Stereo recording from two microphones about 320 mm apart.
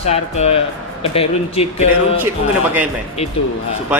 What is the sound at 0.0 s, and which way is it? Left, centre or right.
Speech, centre.